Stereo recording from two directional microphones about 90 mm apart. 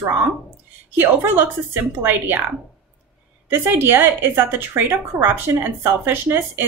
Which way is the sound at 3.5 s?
25° right (ahead or behind).